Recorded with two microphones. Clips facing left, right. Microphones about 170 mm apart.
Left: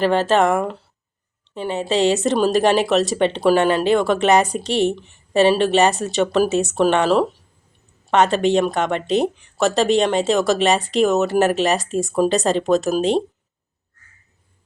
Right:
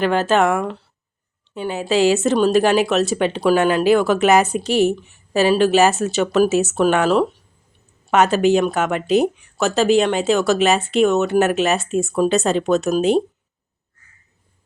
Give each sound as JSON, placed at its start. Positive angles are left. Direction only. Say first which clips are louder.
{"t": 0.0, "sound": "speech", "louder": "even", "side_deg": 0}
{"t": 13.0, "sound": "speech", "louder": "right 2 dB", "side_deg": 35}